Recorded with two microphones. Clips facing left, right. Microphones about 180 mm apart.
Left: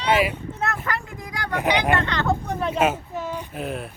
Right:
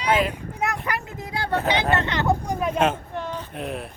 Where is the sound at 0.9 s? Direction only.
20° right (ahead or behind).